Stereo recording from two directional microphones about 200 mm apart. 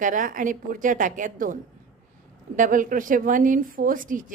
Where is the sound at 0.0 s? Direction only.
40° right (ahead or behind).